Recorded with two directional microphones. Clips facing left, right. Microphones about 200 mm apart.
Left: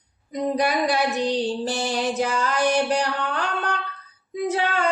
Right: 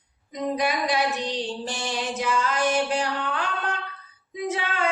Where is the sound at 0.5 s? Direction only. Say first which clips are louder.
Left 3 dB; 35° left (ahead or behind).